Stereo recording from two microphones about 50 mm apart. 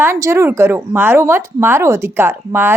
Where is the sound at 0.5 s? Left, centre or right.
Right.